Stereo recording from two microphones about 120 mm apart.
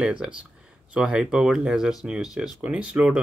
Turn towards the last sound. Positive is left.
turn(degrees=-10)  # may be behind; listen again after turning